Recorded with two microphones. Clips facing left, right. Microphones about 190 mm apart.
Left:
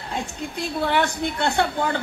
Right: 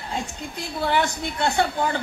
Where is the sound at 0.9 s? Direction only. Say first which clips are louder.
Left 1 dB; 60° left (ahead or behind).